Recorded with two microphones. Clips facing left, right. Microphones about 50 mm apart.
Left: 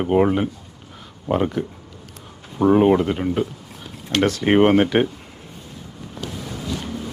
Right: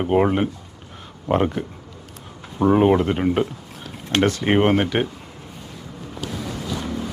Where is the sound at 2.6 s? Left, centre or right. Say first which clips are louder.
Left 1 dB; centre.